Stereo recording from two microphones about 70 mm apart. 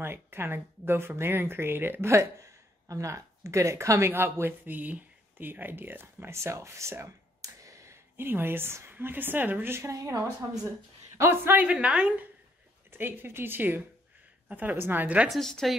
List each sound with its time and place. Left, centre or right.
0.0 s speech: right
4.1 s speech: right
8.2 s speech: right
11.1 s speech: right
11.5 s a woman's voice: centre
12.9 s a woman's voice: right
15.2 s speech: centre